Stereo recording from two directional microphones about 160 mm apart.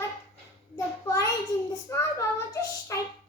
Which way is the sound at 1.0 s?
20° left (ahead or behind).